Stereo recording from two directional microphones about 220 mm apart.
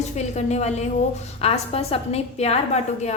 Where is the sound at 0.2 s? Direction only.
30° left (ahead or behind).